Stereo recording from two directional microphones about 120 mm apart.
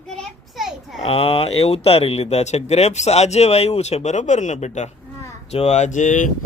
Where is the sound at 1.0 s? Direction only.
50° left (ahead or behind); by 4.9 s 75° left (ahead or behind).